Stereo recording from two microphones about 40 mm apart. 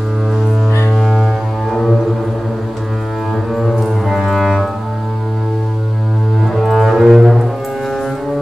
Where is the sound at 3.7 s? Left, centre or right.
Centre.